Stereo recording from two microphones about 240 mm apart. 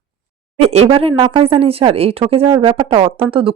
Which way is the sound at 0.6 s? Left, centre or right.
Right.